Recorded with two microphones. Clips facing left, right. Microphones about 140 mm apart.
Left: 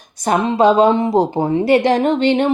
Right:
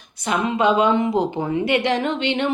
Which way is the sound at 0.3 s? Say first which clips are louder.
Left 5 dB; 35° left (ahead or behind).